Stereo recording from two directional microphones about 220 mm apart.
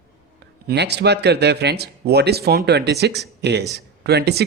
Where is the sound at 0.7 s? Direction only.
50° right (ahead or behind).